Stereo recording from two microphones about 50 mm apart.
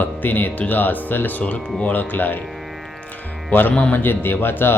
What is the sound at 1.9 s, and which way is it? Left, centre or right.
Speech, left.